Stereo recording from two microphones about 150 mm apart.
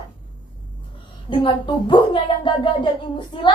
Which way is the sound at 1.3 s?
35° left (ahead or behind).